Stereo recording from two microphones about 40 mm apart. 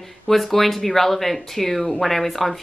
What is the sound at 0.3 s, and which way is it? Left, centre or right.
A woman's voice, centre.